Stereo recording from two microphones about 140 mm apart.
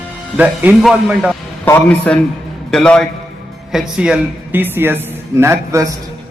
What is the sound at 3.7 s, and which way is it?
A man's voice, 5° right (ahead or behind).